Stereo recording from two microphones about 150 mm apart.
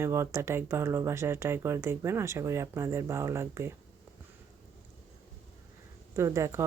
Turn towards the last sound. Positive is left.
turn(degrees=-20)  # may be behind; listen again after turning